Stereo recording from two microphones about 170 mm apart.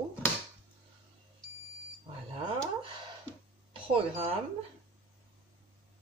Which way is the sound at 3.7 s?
35° right (ahead or behind).